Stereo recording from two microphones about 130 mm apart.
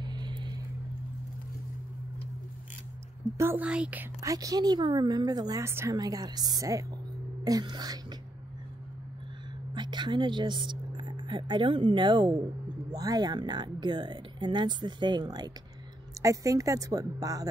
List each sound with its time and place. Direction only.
0.0 s vehicle: 35° right (ahead or behind)
3.3 s a woman's voice: 15° right (ahead or behind)
4.2 s speech: 25° right (ahead or behind)
5.9 s a woman's voice: 30° right (ahead or behind)
9.8 s a sound: 35° right (ahead or behind)
11.9 s a woman's voice: 35° right (ahead or behind)